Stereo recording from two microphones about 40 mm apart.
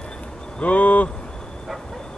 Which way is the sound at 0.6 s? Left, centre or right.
Left.